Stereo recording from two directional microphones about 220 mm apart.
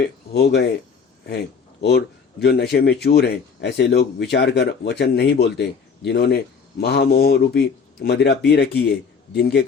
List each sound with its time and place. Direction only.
0.0 s speech: 45° left (ahead or behind)